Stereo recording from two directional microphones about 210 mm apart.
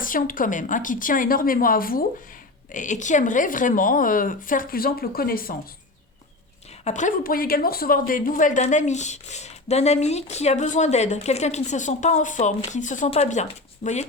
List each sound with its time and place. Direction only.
0.0 s speech: 40° left (ahead or behind)
6.8 s speech: 35° left (ahead or behind)